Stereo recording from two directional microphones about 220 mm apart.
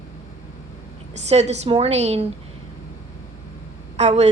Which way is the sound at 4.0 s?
30° right (ahead or behind).